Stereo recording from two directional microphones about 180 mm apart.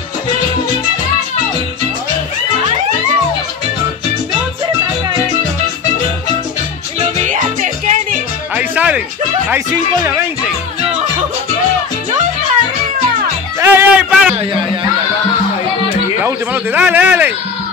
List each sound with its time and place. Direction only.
7.0 s music: 40° right (ahead or behind)
8.5 s music: 10° right (ahead or behind)
13.6 s music: 10° right (ahead or behind)
16.2 s speech: 10° right (ahead or behind)